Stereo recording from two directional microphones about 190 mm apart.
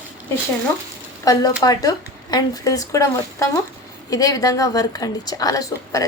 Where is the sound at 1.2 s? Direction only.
20° left (ahead or behind).